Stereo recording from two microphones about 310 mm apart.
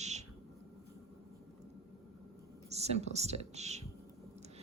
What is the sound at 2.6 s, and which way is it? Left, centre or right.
A woman's voice, right.